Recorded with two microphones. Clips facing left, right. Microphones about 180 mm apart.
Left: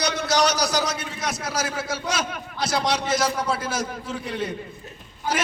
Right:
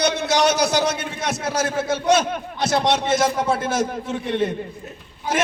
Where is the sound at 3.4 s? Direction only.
50° right (ahead or behind).